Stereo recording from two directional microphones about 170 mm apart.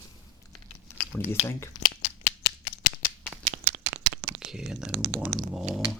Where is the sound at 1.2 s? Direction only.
15° left (ahead or behind).